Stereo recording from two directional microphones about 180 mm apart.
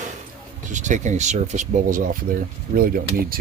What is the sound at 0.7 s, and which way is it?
Speech, 40° right (ahead or behind).